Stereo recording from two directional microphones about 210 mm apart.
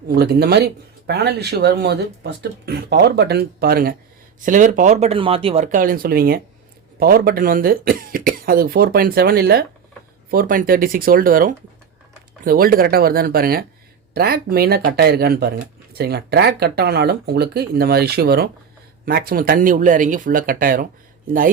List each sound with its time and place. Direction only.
0.2 s speech: 50° right (ahead or behind); by 5.6 s 25° right (ahead or behind)
5.7 s speech: 40° right (ahead or behind)